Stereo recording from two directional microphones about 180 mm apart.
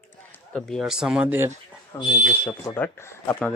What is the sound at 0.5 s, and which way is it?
Speech, centre (ahead or behind).